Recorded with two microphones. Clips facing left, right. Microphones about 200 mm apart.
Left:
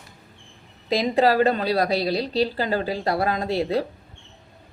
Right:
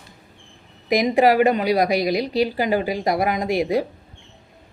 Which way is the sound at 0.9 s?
15° right (ahead or behind).